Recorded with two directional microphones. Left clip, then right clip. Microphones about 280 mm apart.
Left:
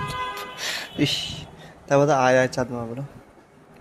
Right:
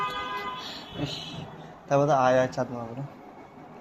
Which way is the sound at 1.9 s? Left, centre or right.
Left.